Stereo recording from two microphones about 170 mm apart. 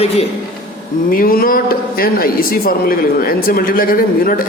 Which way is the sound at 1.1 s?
60° left (ahead or behind).